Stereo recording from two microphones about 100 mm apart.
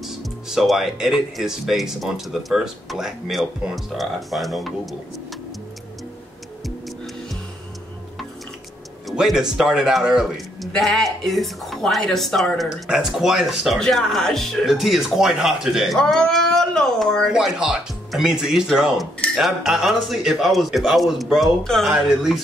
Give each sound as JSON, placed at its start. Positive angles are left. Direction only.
{"t": 0.0, "sound": "a man's voice", "side_deg": 0}
{"t": 9.0, "sound": "a man's voice", "side_deg": -5}